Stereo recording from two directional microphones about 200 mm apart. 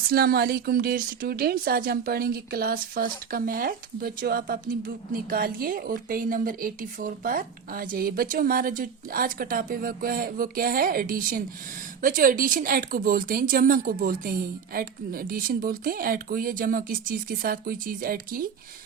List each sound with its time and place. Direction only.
0.1 s speech: 50° right (ahead or behind)